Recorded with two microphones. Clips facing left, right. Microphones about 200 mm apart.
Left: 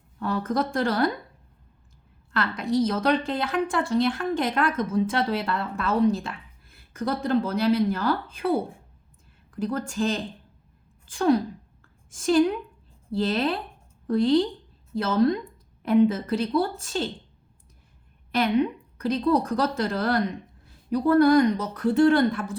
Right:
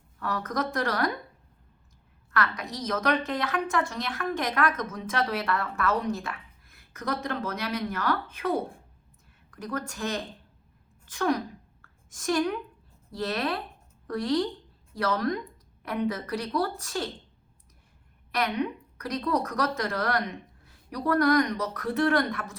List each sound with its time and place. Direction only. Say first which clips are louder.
0.2 s a woman's voice: left 5 dB; 30° left (ahead or behind)
2.3 s a woman's voice: left 6 dB; 25° left (ahead or behind)
18.3 s a woman's voice: left 6 dB; 25° left (ahead or behind)